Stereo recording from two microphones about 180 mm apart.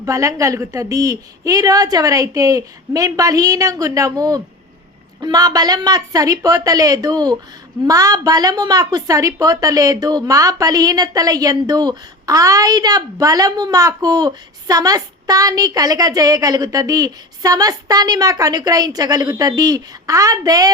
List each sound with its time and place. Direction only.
0.0 s a woman's voice: 20° right (ahead or behind)